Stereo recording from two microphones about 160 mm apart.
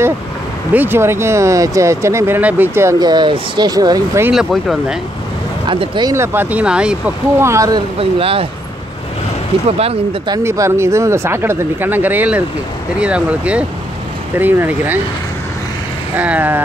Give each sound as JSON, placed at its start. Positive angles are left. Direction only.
{"t": 0.7, "sound": "speech", "side_deg": -15}
{"t": 4.3, "sound": "speech", "side_deg": 0}
{"t": 5.7, "sound": "speech", "side_deg": -30}
{"t": 6.1, "sound": "speech", "side_deg": -15}
{"t": 7.4, "sound": "speech", "side_deg": -20}
{"t": 8.0, "sound": "speech", "side_deg": -35}
{"t": 9.7, "sound": "speech", "side_deg": -40}
{"t": 10.3, "sound": "speech", "side_deg": -20}
{"t": 16.2, "sound": "speech", "side_deg": -10}